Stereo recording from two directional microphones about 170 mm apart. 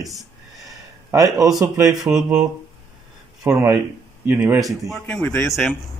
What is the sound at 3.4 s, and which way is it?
Speech, 15° right (ahead or behind).